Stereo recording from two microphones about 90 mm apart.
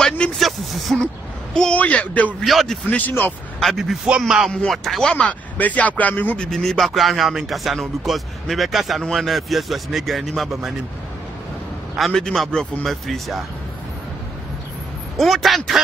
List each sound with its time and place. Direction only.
0.0 s vehicle: 5° left (ahead or behind)
1.5 s a sound: 10° left (ahead or behind)
2.4 s speech: 5° left (ahead or behind)
3.1 s speech: 20° left (ahead or behind)
3.5 s speech: centre (ahead or behind)
5.1 s speech: 15° left (ahead or behind); by 10.7 s centre (ahead or behind)
12.0 s speech: 5° left (ahead or behind)
15.1 s speech: centre (ahead or behind)